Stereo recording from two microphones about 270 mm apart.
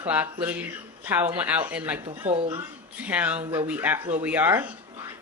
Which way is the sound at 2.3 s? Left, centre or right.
Right.